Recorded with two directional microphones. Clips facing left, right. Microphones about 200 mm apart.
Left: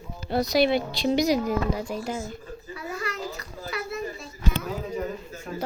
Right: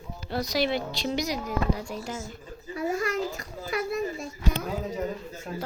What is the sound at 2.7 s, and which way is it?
Children playing, 45° right (ahead or behind).